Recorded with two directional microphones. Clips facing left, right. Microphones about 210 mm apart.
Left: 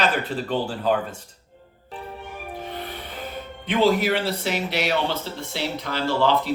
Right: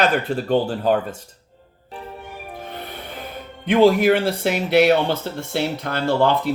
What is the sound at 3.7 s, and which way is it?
Speech, 50° right (ahead or behind).